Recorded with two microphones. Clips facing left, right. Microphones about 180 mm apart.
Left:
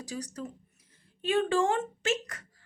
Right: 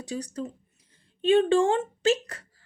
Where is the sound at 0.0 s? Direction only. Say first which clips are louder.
Right 5 dB; 30° right (ahead or behind).